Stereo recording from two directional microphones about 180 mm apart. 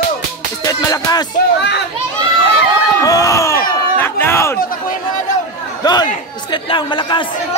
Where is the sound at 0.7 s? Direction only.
20° left (ahead or behind).